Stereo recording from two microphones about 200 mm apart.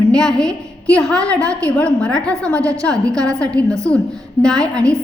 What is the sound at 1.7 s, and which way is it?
A woman's voice, 5° left (ahead or behind).